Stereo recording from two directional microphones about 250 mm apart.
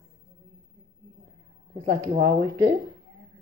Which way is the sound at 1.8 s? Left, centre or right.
Right.